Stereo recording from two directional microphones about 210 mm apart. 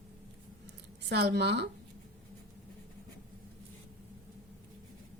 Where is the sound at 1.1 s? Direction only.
50° right (ahead or behind).